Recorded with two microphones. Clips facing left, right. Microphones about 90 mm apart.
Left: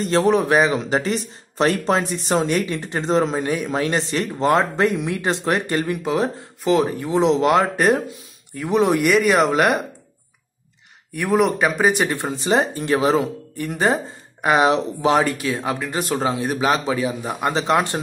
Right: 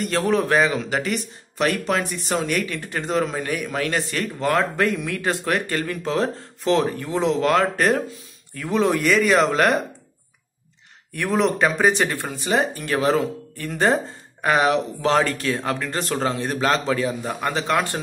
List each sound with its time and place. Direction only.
0.0 s a man's voice: 25° left (ahead or behind); by 6.9 s 5° left (ahead or behind)
7.0 s a man's voice: 20° left (ahead or behind)
11.1 s speech: 10° left (ahead or behind)
12.2 s a man's voice: 25° left (ahead or behind)